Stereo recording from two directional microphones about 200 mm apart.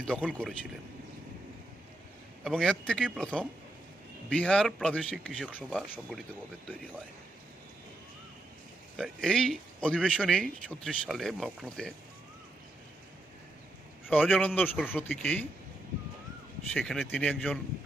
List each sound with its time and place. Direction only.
0.3 s speech: 5° left (ahead or behind)
2.4 s speech: centre (ahead or behind)
9.0 s speech: centre (ahead or behind)
14.1 s a man's voice: 10° left (ahead or behind)
16.7 s speech: 5° left (ahead or behind)